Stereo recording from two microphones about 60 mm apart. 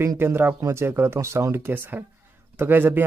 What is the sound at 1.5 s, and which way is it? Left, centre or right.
Speech, right.